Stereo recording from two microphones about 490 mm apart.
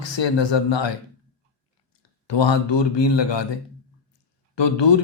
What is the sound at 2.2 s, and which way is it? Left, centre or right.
Speech, left.